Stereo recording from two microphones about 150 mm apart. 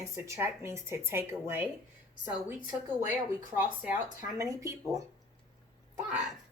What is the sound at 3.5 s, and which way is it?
A woman's voice, 10° right (ahead or behind).